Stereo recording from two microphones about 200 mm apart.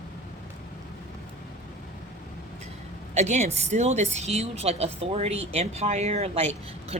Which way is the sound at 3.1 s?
35° right (ahead or behind).